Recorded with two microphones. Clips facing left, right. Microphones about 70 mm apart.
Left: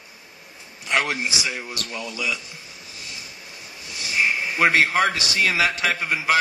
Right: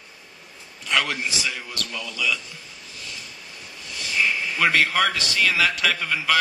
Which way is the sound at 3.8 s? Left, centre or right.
Centre.